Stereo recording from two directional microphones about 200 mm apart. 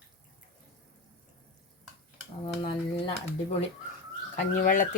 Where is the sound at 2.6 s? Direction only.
25° left (ahead or behind).